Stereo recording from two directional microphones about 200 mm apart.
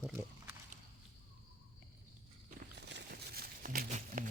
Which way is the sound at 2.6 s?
55° right (ahead or behind).